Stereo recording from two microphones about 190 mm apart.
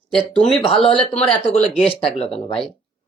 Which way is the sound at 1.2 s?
30° left (ahead or behind).